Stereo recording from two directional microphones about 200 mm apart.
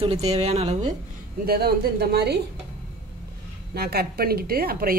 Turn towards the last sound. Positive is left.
turn(degrees=-50)  # may be behind; listen again after turning